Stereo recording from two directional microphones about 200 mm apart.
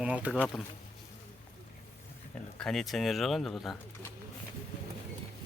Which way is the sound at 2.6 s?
Centre (ahead or behind).